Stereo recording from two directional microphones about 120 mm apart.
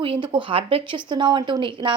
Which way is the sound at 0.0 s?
45° right (ahead or behind).